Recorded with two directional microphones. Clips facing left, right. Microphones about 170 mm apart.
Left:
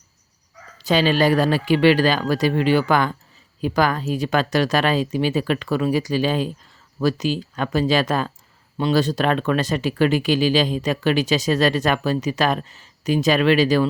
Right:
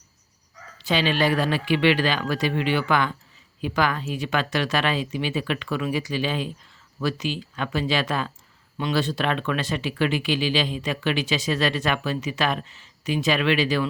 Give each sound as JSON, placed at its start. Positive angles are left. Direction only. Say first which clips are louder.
{"t": 0.8, "sound": "speech", "louder": "left 5 dB", "side_deg": 40}